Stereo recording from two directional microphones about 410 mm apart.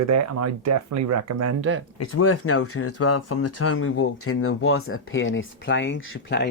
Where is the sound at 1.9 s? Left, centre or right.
Left.